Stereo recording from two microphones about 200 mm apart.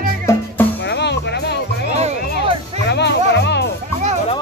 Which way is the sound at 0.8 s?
60° left (ahead or behind).